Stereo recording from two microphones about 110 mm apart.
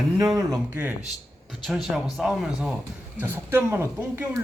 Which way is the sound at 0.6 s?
20° right (ahead or behind).